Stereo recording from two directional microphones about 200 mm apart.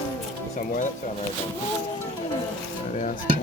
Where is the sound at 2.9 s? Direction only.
40° left (ahead or behind).